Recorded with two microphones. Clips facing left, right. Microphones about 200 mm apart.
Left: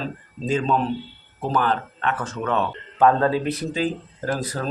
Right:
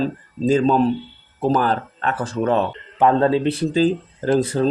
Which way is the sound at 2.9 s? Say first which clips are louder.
Right 2 dB; 25° right (ahead or behind).